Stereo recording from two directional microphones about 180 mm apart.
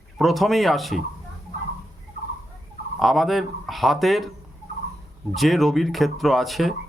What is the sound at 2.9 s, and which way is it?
Speech, centre (ahead or behind).